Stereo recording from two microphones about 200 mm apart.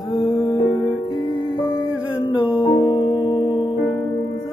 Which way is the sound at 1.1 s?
25° left (ahead or behind).